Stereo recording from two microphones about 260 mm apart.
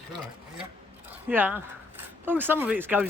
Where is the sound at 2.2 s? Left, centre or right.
Centre.